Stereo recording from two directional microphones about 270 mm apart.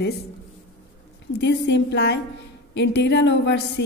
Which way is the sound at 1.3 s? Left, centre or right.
Left.